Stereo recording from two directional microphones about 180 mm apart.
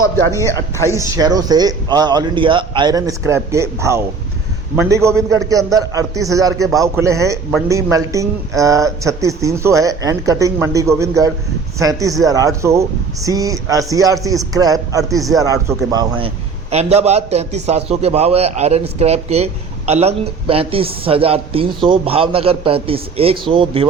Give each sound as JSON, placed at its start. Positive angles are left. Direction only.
{"t": 0.9, "sound": "speech", "side_deg": -15}
{"t": 16.7, "sound": "a man's voice", "side_deg": -35}